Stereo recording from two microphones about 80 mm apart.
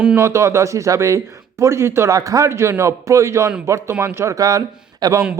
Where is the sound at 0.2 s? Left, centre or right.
Right.